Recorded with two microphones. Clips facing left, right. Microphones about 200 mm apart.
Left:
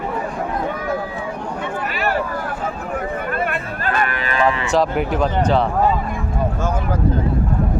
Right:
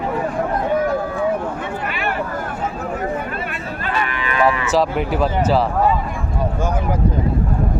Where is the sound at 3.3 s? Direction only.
55° left (ahead or behind).